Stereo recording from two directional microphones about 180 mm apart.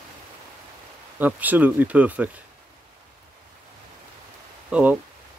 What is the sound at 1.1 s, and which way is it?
Speech, 10° right (ahead or behind).